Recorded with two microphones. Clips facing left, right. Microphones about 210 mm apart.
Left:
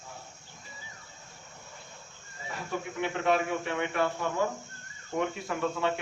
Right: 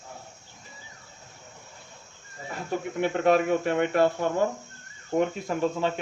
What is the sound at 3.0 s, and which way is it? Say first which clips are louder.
Speech: right 6 dB; 45° right (ahead or behind).